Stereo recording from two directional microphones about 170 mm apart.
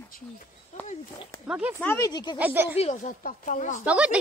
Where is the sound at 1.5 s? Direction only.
10° right (ahead or behind).